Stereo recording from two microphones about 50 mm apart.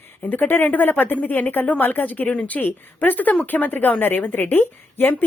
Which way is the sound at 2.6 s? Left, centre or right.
Left.